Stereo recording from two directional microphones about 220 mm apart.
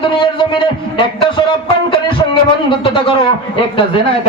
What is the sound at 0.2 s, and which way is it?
A man's voice, 20° left (ahead or behind).